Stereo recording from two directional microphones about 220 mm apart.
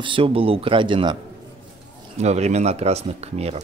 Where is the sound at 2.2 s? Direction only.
30° right (ahead or behind).